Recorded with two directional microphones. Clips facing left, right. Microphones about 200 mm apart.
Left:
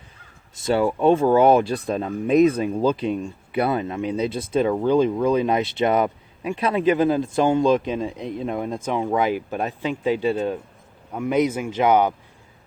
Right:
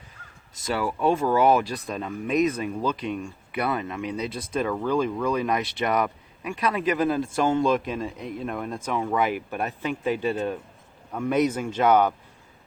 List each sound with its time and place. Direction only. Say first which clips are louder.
0.6 s speech: left 6 dB; 25° left (ahead or behind)
7.9 s speech: left 4 dB; centre (ahead or behind)
8.4 s speech: left 4 dB; 20° left (ahead or behind)